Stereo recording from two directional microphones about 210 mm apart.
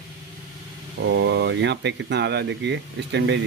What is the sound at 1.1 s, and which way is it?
Speech, 60° right (ahead or behind).